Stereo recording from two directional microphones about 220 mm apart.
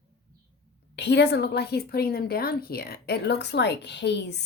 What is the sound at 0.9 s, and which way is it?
A woman's voice, 50° left (ahead or behind).